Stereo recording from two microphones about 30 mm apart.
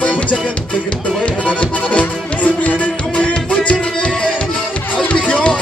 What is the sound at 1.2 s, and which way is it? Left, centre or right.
Music, left.